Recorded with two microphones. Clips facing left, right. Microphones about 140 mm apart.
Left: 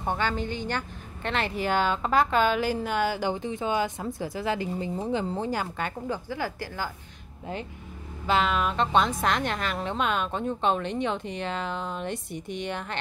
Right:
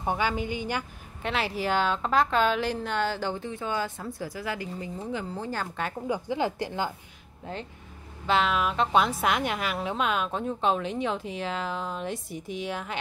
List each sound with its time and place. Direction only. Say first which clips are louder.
0.0 s a woman's voice: even; 10° right (ahead or behind); by 5.5 s 30° left (ahead or behind)
5.8 s a woman's voice: even; centre (ahead or behind)
6.0 s a woman's voice: right 7 dB; 15° right (ahead or behind)
8.3 s a woman's voice: even; centre (ahead or behind)